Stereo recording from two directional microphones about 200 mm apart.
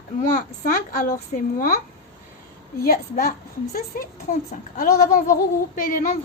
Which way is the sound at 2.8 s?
50° left (ahead or behind).